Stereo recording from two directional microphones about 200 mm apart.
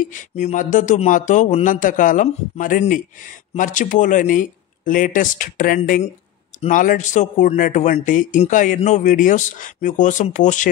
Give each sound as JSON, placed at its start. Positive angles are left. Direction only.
{"t": 0.0, "sound": "speech", "side_deg": 40}